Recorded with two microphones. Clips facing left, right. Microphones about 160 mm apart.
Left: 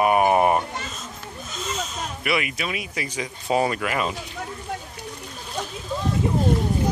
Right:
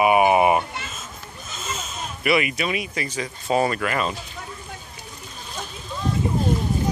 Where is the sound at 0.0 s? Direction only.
10° right (ahead or behind).